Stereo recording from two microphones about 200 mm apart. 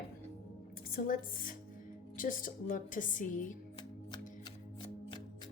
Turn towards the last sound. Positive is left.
turn(degrees=25)  # may be behind; listen again after turning